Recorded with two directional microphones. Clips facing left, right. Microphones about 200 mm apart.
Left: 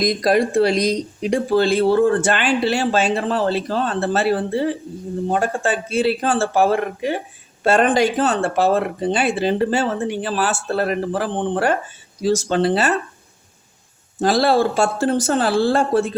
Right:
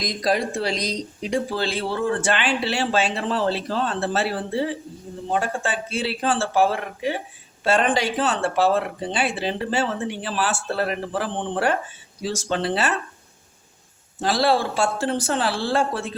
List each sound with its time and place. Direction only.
0.0 s speech: 55° left (ahead or behind)
14.2 s speech: 45° left (ahead or behind)